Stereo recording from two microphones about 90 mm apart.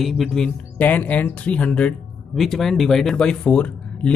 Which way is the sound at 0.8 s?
20° left (ahead or behind).